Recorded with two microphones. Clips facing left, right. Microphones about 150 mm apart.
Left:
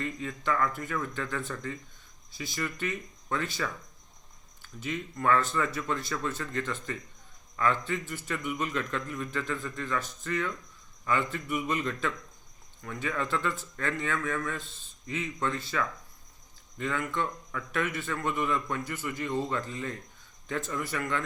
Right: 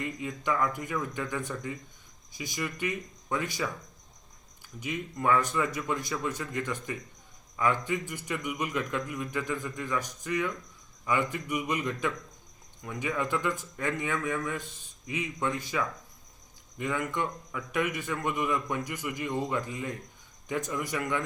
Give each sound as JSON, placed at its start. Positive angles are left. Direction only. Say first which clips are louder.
{"t": 0.0, "sound": "a man's voice", "louder": "even", "side_deg": -15}